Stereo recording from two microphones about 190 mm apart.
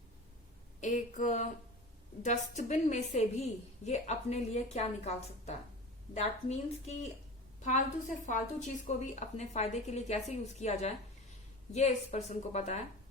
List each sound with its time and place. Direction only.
0.8 s a woman's voice: 40° left (ahead or behind)
8.3 s a woman's voice: 40° left (ahead or behind)